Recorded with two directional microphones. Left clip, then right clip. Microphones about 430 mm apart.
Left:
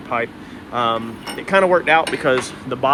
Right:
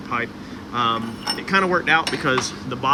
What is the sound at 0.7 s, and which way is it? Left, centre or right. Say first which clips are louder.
Speech: left 2 dB; centre.